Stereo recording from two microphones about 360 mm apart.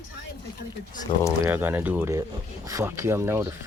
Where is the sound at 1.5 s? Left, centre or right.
Centre.